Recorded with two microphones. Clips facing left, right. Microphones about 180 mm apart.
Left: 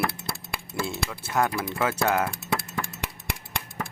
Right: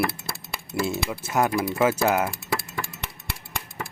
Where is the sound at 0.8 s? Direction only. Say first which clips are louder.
Right 5 dB; 20° right (ahead or behind).